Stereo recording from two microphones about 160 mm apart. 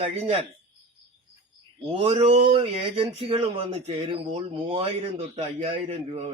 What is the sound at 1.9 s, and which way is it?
Speech, 40° right (ahead or behind).